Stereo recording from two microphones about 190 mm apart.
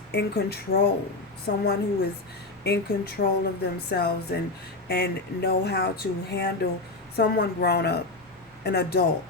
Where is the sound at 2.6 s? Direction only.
60° left (ahead or behind).